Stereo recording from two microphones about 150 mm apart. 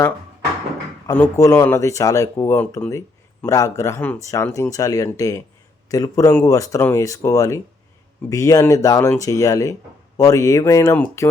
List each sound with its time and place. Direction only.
1.0 s speech: 15° left (ahead or behind)